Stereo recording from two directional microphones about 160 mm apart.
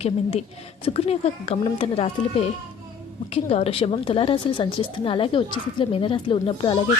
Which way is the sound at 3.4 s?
40° left (ahead or behind).